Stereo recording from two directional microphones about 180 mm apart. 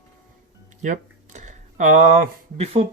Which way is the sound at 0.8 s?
45° right (ahead or behind).